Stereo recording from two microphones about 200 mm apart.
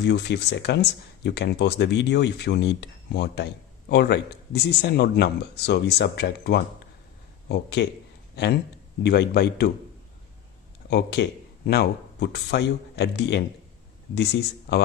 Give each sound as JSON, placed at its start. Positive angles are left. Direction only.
{"t": 0.0, "sound": "speech", "side_deg": 60}
{"t": 9.0, "sound": "speech", "side_deg": 55}
{"t": 10.9, "sound": "speech", "side_deg": 55}